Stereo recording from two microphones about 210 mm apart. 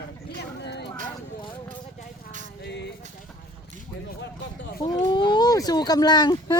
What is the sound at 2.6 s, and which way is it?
Vehicle, 55° left (ahead or behind).